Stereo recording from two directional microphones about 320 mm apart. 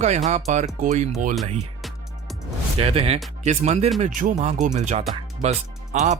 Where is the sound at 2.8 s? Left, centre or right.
Centre.